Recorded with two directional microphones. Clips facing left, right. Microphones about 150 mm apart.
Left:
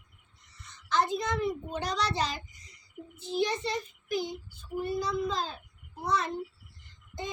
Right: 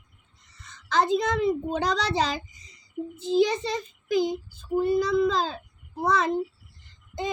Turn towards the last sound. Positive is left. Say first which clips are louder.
# right 8 dB
turn(degrees=-90)